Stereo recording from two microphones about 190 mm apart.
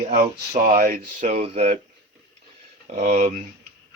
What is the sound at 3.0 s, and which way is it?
Speech, 40° right (ahead or behind).